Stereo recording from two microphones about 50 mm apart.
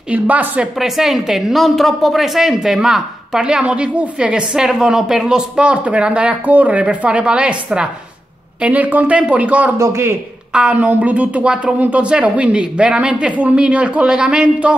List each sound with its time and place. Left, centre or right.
0.1 s speech: right
0.7 s a woman's voice: centre
5.7 s speech: right
9.8 s a man's voice: right
10.5 s speech: right